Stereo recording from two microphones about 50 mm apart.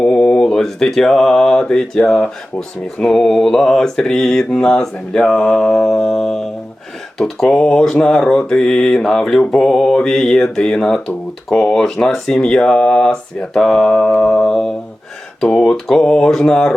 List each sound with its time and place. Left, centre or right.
0.0 s speech: centre